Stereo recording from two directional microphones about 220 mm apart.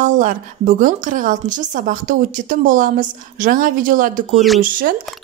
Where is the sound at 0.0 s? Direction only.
35° right (ahead or behind).